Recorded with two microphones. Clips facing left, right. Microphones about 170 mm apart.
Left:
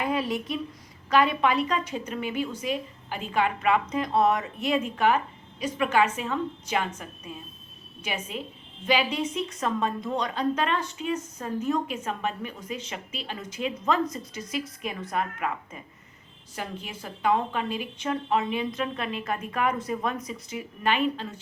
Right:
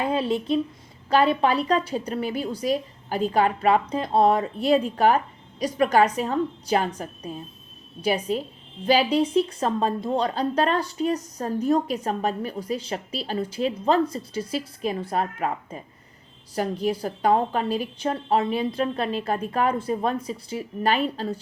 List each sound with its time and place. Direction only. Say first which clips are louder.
0.0 s a woman's voice: right 4 dB; 30° right (ahead or behind)